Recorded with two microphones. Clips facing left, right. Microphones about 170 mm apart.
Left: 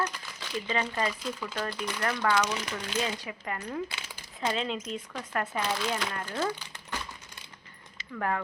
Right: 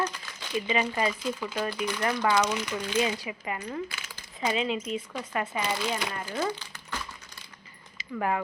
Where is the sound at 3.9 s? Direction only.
25° left (ahead or behind).